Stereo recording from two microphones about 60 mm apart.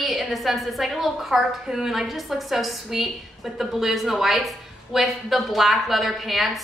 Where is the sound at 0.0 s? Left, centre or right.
Centre.